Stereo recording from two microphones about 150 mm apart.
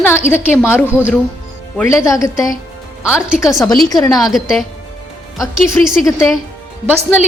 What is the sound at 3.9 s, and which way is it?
Speech, 25° left (ahead or behind).